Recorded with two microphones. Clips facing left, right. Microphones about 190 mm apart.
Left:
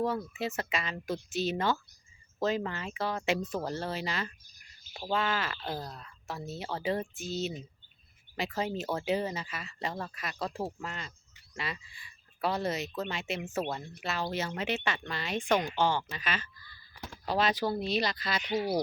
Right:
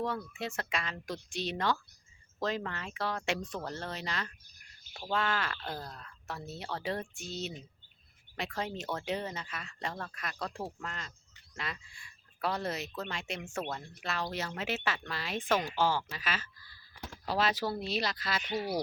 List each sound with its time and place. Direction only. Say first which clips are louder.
0.3 s speech: left 3 dB; 5° left (ahead or behind)
18.5 s speech: left 4 dB; 20° left (ahead or behind)